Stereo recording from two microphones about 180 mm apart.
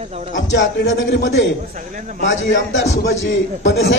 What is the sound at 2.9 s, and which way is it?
Speech, 40° left (ahead or behind).